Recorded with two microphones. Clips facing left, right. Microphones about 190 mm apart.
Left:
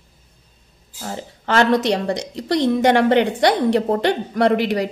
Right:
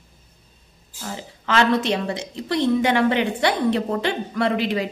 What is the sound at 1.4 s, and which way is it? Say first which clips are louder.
A woman's voice: left 3 dB; 45° left (ahead or behind).